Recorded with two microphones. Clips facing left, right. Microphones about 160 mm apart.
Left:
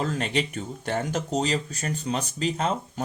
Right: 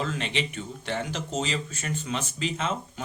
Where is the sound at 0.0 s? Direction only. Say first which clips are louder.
Left 3 dB; 40° left (ahead or behind).